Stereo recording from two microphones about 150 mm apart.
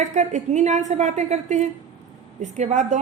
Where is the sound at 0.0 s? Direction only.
50° right (ahead or behind).